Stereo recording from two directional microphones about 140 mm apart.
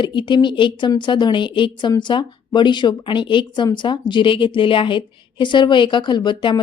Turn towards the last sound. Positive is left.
turn(degrees=35)  # may be behind; listen again after turning